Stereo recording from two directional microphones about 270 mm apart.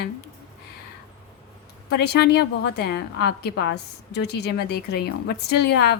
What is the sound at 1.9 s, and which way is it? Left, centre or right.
A woman's voice, left.